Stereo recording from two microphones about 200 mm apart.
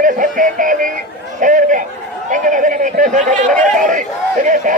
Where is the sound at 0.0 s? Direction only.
40° right (ahead or behind).